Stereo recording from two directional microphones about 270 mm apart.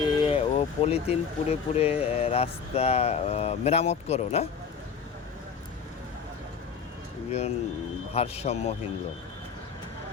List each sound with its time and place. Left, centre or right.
0.0 s speech: centre
7.3 s speech: left